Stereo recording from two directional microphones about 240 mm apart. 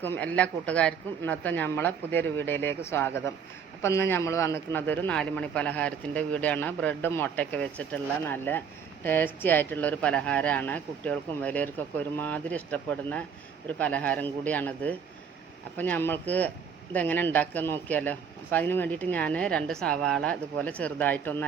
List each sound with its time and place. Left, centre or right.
0.0 s a man's voice: centre